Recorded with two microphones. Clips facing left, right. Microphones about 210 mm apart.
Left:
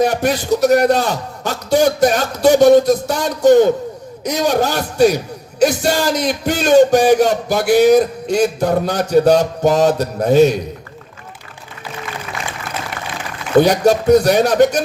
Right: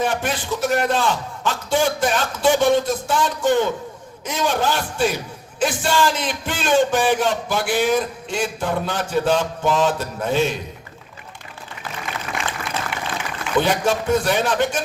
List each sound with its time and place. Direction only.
0.0 s a man's voice: 40° left (ahead or behind)
13.6 s a man's voice: 40° left (ahead or behind)